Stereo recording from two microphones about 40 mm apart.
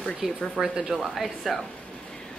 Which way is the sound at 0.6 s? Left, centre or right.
Centre.